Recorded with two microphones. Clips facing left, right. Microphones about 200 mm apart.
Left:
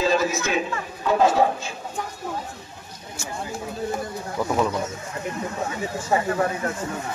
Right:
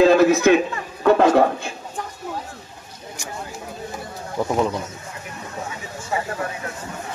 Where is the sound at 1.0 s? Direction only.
65° right (ahead or behind).